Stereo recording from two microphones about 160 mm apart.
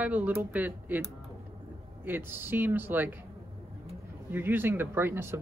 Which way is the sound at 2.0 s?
15° right (ahead or behind).